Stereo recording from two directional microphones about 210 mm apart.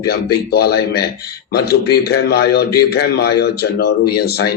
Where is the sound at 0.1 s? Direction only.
50° left (ahead or behind).